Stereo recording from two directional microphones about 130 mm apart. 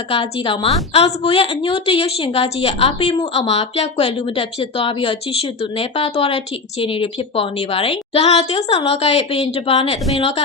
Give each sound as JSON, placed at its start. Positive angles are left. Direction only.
{"t": 0.1, "sound": "a woman's voice", "side_deg": 45}